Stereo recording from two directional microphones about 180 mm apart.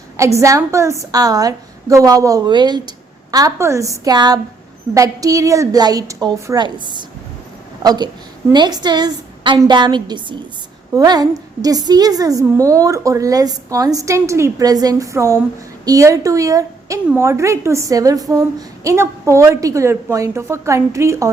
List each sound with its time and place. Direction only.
0.3 s a woman's voice: 15° right (ahead or behind)